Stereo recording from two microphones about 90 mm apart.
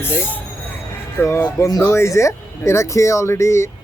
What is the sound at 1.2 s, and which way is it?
A man's voice, 30° left (ahead or behind).